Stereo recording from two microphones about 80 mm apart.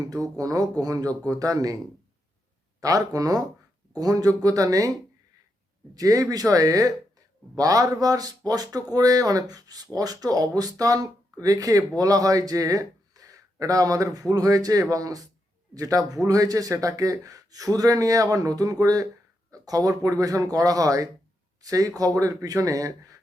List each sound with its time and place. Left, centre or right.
0.1 s speech: right
2.8 s speech: right
5.9 s speech: right